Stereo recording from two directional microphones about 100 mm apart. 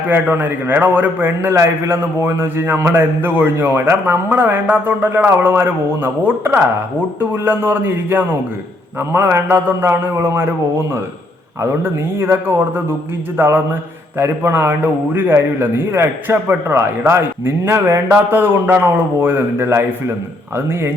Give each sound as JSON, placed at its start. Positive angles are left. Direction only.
{"t": 0.1, "sound": "a man's voice", "side_deg": -20}